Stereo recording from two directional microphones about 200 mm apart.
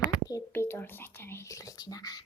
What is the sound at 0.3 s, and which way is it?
Speech, 15° left (ahead or behind).